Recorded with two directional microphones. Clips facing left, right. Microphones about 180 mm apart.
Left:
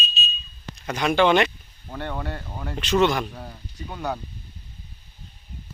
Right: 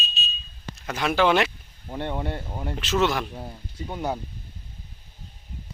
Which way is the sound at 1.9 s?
20° right (ahead or behind).